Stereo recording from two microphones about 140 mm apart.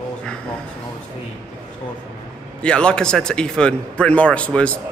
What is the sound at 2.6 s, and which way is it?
A man's voice, 5° left (ahead or behind).